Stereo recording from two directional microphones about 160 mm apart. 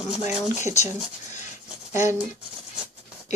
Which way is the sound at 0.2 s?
45° left (ahead or behind).